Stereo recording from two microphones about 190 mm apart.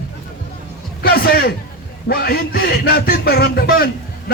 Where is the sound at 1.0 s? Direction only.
50° left (ahead or behind).